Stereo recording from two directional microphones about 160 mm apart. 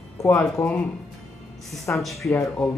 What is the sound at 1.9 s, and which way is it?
Speech, 10° left (ahead or behind).